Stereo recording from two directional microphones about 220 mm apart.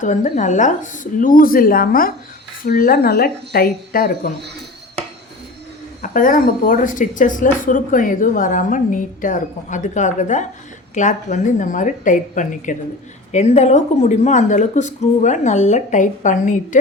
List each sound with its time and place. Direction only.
0.0 s speech: 35° left (ahead or behind)
6.0 s speech: 40° left (ahead or behind)